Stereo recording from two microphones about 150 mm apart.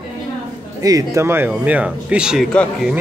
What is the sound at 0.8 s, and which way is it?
Speech, 25° right (ahead or behind).